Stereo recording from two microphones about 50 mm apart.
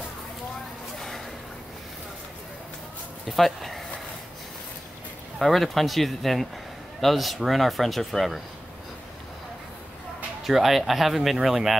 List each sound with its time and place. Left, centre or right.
0.9 s a sound: centre
3.3 s speech: centre
5.4 s a man's voice: centre
10.4 s a man's voice: centre